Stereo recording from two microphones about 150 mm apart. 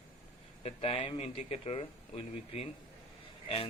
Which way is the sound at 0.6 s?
40° left (ahead or behind).